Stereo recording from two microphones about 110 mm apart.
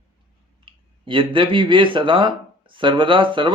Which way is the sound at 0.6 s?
50° right (ahead or behind).